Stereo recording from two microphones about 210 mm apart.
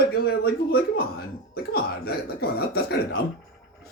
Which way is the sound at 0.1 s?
50° left (ahead or behind).